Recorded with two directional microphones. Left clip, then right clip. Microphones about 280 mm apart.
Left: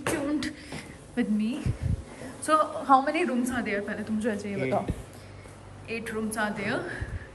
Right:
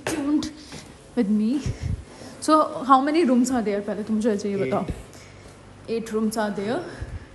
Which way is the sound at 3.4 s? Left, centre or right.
Centre.